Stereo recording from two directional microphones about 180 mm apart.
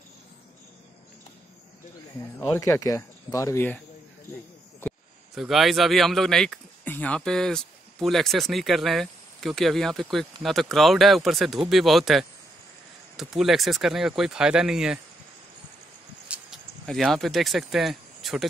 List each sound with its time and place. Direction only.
2.1 s speech: 15° left (ahead or behind)
5.3 s speech: centre (ahead or behind)
16.3 s speech: centre (ahead or behind)